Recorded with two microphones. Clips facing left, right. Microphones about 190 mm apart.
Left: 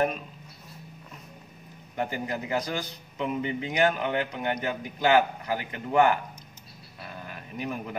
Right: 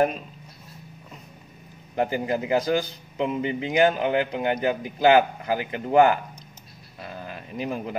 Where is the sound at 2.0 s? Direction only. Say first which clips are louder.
Right 6 dB; 30° right (ahead or behind).